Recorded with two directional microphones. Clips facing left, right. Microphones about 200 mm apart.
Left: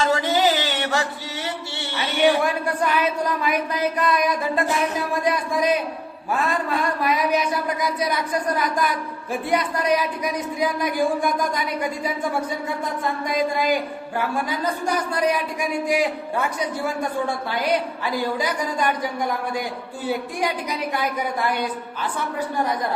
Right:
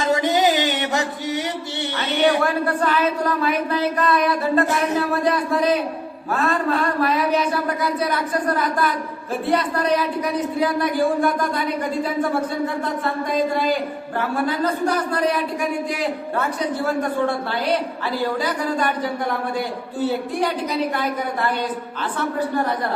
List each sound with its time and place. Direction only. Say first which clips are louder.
0.0 s a sound: right 2 dB; 15° right (ahead or behind)
2.0 s speech: even; 15° left (ahead or behind)
13.3 s speech: right 1 dB; 10° left (ahead or behind)